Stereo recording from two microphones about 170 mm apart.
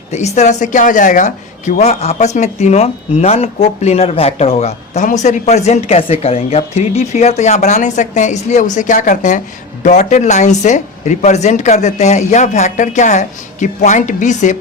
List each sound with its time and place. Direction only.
0.1 s a woman's voice: 40° left (ahead or behind)